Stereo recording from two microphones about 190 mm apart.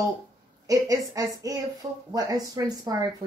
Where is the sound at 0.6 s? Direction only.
20° right (ahead or behind).